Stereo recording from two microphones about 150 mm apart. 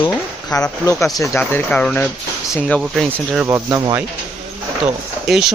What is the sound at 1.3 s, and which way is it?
Speech, 10° left (ahead or behind).